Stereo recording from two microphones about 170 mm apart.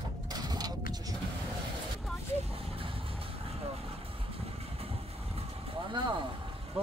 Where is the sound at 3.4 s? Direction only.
35° right (ahead or behind).